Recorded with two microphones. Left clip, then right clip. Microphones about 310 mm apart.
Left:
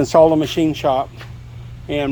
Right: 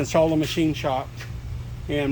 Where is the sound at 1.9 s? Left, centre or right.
Centre.